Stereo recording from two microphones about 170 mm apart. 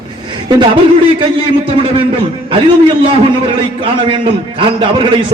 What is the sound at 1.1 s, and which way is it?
Speech, 30° right (ahead or behind).